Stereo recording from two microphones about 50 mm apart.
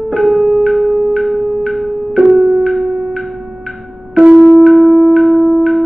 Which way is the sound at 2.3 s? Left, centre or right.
Right.